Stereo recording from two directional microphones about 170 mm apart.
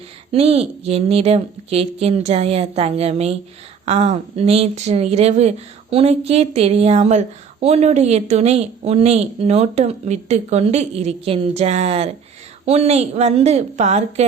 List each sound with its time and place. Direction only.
0.3 s speech: 35° right (ahead or behind)